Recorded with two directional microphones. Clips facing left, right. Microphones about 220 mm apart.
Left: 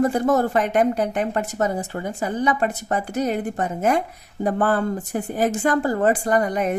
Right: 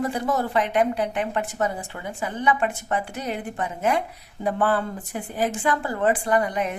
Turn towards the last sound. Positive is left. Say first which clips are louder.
# left 3 dB
turn(degrees=45)  # may be behind; listen again after turning